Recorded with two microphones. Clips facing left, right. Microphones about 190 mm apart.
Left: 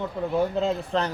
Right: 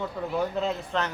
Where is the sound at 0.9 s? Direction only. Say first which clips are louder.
Left 3 dB; 35° left (ahead or behind).